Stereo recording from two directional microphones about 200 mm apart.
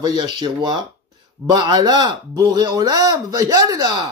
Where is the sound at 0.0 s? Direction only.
20° right (ahead or behind).